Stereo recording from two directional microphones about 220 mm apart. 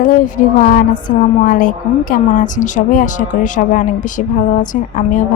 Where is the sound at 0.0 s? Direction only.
40° left (ahead or behind).